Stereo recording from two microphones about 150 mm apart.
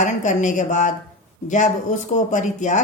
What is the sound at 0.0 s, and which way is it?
Speech, 55° left (ahead or behind).